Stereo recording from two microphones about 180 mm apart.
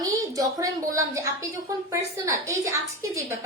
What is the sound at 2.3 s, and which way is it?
A woman's voice, 15° right (ahead or behind).